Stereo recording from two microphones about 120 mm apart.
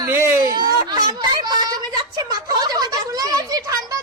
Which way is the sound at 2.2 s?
30° right (ahead or behind).